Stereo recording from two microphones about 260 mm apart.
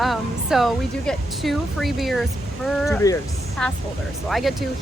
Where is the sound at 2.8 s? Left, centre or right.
Centre.